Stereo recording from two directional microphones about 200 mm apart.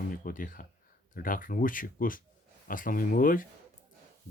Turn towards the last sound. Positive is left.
turn(degrees=45)  # may be behind; listen again after turning